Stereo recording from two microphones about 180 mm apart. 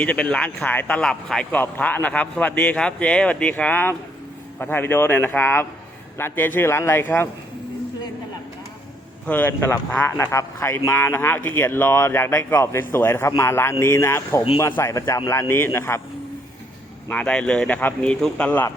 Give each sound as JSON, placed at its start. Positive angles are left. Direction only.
{"t": 0.0, "sound": "speech", "side_deg": 10}
{"t": 9.2, "sound": "speech", "side_deg": 10}
{"t": 17.1, "sound": "speech", "side_deg": 5}